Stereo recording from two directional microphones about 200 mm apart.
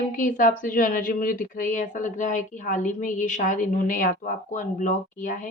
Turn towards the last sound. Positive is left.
turn(degrees=40)  # may be behind; listen again after turning